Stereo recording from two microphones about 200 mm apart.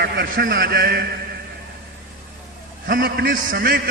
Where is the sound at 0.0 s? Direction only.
50° right (ahead or behind).